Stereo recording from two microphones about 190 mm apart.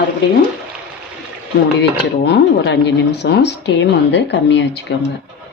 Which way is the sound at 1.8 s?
65° left (ahead or behind).